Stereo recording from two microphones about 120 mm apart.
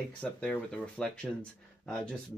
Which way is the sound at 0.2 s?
10° left (ahead or behind).